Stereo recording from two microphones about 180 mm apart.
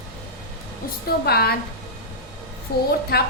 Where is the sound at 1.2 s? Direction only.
60° left (ahead or behind).